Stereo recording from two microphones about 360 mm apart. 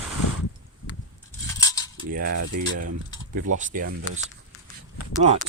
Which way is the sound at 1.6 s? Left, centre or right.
Centre.